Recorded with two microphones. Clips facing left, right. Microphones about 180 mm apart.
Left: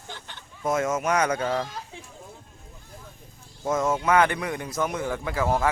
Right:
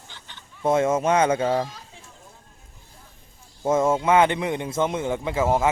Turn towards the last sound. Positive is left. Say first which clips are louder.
# right 3 dB
turn(degrees=-25)  # may be behind; listen again after turning